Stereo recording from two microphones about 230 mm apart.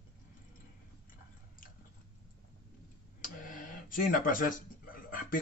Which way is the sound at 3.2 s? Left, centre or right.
Left.